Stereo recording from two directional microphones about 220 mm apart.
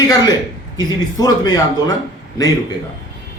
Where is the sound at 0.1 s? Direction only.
15° left (ahead or behind).